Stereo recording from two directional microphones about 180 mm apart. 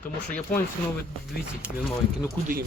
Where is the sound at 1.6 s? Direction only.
5° right (ahead or behind).